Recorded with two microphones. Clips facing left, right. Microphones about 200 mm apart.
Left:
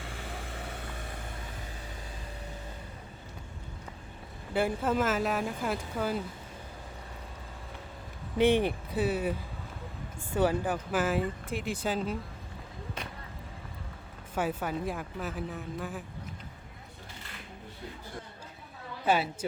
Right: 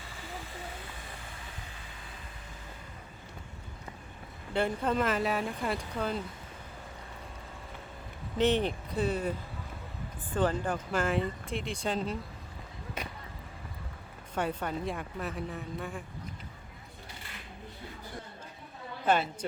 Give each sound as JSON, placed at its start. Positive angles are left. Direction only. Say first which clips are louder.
{"t": 0.0, "sound": "vehicle", "louder": "left 3 dB", "side_deg": 65}
{"t": 4.5, "sound": "speech", "louder": "left 1 dB", "side_deg": 5}
{"t": 8.4, "sound": "speech", "louder": "left 2 dB", "side_deg": 10}
{"t": 10.3, "sound": "speech", "louder": "left 2 dB", "side_deg": 10}
{"t": 14.3, "sound": "speech", "louder": "left 1 dB", "side_deg": 5}
{"t": 19.0, "sound": "speech", "louder": "even", "side_deg": 5}